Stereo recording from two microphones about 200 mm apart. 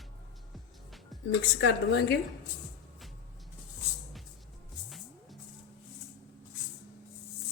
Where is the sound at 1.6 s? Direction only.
60° left (ahead or behind).